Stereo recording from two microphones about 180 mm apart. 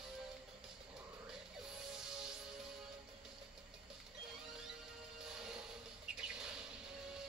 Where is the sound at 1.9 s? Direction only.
5° right (ahead or behind).